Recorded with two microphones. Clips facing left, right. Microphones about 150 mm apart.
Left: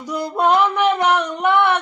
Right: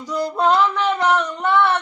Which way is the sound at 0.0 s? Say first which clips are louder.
Even; 10° left (ahead or behind).